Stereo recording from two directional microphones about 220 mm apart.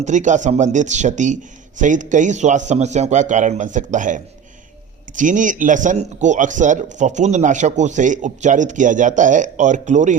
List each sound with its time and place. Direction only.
0.0 s speech: 35° right (ahead or behind)